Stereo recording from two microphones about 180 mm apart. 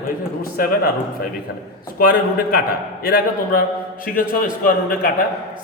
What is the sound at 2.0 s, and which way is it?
A man's voice, 50° left (ahead or behind).